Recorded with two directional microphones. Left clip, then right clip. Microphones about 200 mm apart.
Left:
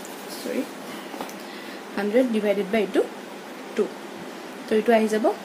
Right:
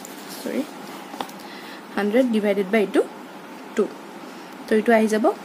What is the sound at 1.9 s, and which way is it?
A woman's voice, 25° right (ahead or behind).